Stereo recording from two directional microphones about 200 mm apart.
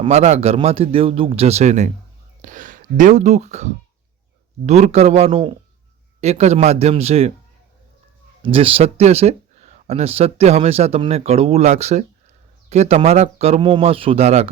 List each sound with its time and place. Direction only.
0.0 s speech: 30° right (ahead or behind)
8.4 s speech: 25° right (ahead or behind)